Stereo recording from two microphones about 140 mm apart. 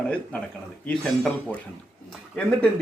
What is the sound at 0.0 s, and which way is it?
Speech, 10° left (ahead or behind).